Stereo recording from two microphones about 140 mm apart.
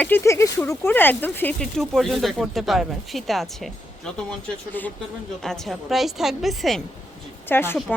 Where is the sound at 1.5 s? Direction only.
Centre (ahead or behind).